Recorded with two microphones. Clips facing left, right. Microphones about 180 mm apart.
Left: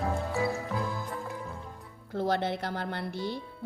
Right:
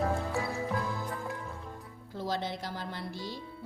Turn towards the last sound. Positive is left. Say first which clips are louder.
# left 5 dB
turn(degrees=65)  # may be behind; listen again after turning